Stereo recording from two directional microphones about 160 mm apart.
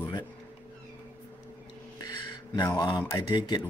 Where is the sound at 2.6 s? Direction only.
25° left (ahead or behind).